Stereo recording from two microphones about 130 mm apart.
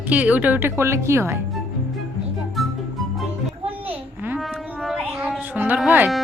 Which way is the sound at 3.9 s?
15° right (ahead or behind).